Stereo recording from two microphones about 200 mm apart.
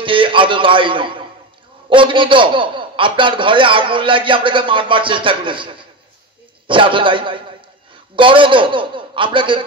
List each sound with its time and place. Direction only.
0.0 s a man's voice: 25° right (ahead or behind)